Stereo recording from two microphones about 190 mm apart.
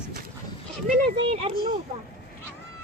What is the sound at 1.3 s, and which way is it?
Speech, 30° right (ahead or behind).